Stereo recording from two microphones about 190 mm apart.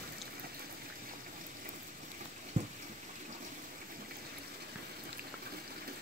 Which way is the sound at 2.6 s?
40° right (ahead or behind).